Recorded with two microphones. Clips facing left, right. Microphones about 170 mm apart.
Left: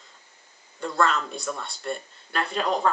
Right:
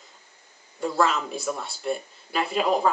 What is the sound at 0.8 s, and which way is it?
Speech, 5° right (ahead or behind).